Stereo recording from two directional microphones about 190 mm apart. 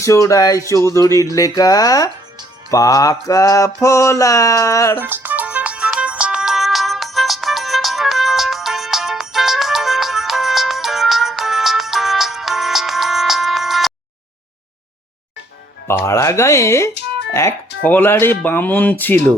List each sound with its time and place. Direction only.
0.0 s mantra: 15° left (ahead or behind)
4.9 s music: 10° right (ahead or behind)
15.9 s mantra: 15° left (ahead or behind)